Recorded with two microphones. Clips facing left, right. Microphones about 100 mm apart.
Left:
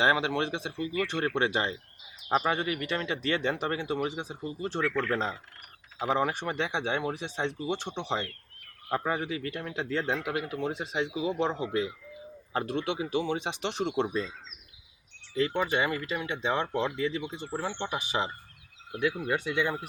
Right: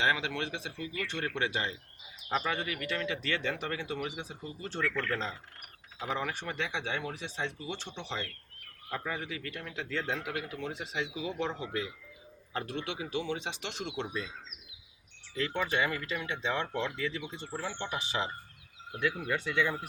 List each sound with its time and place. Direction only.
0.0 s speech: 30° left (ahead or behind); by 5.1 s 10° left (ahead or behind)
6.1 s speech: 20° left (ahead or behind)
15.4 s speech: 20° left (ahead or behind)